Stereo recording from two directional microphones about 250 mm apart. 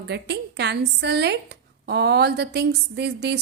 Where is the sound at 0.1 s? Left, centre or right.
Right.